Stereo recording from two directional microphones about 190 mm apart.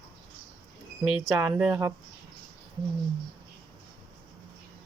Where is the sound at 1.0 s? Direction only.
Centre (ahead or behind).